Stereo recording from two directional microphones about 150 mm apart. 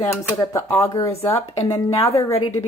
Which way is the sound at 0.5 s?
20° left (ahead or behind).